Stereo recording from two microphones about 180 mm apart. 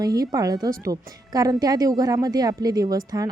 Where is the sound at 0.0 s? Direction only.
20° right (ahead or behind).